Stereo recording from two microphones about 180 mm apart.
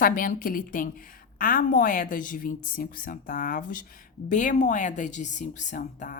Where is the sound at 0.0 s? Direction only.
50° left (ahead or behind).